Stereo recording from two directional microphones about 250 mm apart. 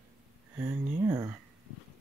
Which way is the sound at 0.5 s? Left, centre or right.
Centre.